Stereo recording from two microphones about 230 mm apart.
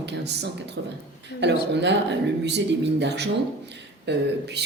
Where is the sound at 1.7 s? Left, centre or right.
Right.